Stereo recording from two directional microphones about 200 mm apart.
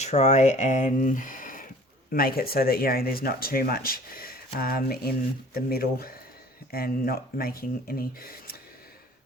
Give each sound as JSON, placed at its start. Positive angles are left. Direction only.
{"t": 0.0, "sound": "speech", "side_deg": 35}